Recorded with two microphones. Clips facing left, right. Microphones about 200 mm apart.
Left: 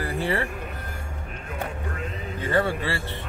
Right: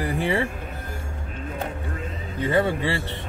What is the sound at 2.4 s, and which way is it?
Speech, 20° right (ahead or behind).